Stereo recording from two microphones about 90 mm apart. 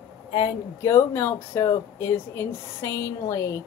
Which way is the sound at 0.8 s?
30° left (ahead or behind).